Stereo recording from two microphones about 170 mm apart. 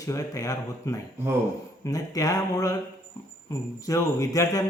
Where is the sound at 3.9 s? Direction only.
20° left (ahead or behind).